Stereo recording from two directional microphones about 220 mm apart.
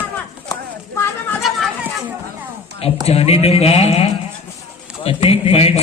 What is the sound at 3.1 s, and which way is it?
Speech, 25° left (ahead or behind).